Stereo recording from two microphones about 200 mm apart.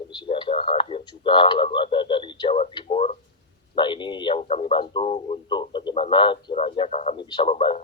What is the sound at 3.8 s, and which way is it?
Speech, 25° left (ahead or behind).